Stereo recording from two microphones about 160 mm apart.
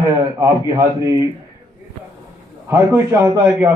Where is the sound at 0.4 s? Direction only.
20° right (ahead or behind).